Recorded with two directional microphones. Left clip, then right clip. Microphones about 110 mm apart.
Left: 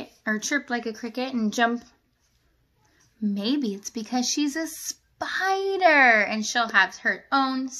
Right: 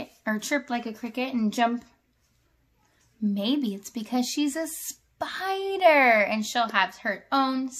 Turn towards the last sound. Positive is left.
turn(degrees=-55)  # may be behind; listen again after turning